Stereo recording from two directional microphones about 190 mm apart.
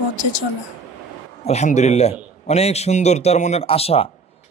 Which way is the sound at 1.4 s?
35° left (ahead or behind).